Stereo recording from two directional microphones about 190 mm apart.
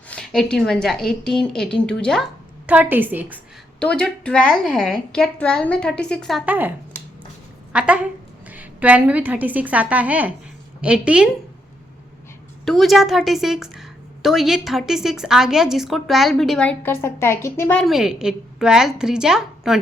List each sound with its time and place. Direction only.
0.1 s a woman's voice: 5° left (ahead or behind)
2.6 s a woman's voice: 10° right (ahead or behind)
3.8 s a woman's voice: 5° left (ahead or behind)
12.6 s a woman's voice: centre (ahead or behind)